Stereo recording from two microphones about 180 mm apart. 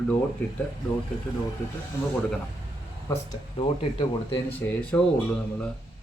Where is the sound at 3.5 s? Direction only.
35° left (ahead or behind).